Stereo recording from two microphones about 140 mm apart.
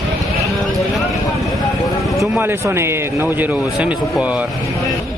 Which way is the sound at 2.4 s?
20° right (ahead or behind).